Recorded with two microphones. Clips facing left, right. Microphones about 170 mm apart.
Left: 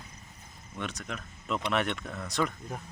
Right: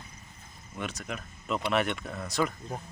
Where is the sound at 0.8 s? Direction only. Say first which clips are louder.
Right 1 dB; 5° right (ahead or behind).